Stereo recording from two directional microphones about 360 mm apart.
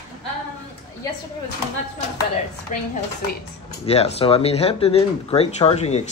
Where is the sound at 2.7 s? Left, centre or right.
Centre.